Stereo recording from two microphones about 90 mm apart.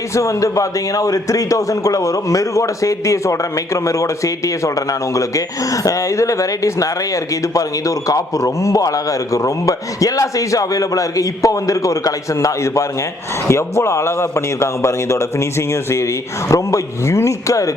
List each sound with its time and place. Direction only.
0.1 s a man's voice: 35° left (ahead or behind)